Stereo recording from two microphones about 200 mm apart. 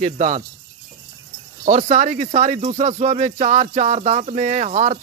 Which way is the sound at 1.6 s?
40° right (ahead or behind).